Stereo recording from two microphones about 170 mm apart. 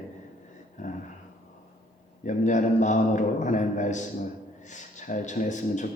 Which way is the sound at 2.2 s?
45° left (ahead or behind).